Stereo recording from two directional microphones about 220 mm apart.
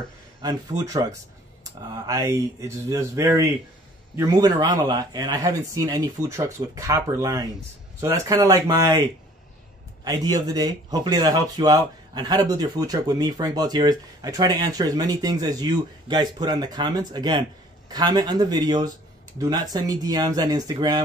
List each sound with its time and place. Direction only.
0.4 s speech: 15° right (ahead or behind)
10.0 s speech: 15° right (ahead or behind)